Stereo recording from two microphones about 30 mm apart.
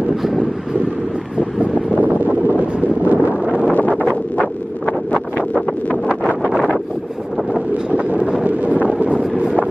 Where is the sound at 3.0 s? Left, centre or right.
Right.